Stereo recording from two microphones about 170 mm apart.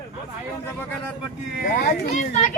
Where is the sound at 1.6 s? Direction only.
50° left (ahead or behind).